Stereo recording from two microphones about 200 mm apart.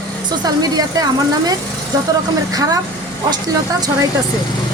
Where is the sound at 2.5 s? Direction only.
20° right (ahead or behind).